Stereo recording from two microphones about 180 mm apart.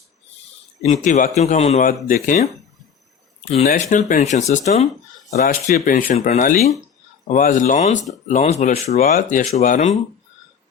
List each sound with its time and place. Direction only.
0.8 s speech: 45° left (ahead or behind)
2.2 s speech: 50° left (ahead or behind)
3.7 s speech: 45° left (ahead or behind)
5.4 s speech: 55° left (ahead or behind); by 9.0 s 35° left (ahead or behind)
9.0 s speech: 50° left (ahead or behind)